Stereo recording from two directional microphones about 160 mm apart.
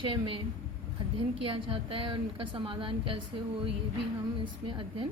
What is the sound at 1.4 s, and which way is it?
A woman's voice, 35° right (ahead or behind).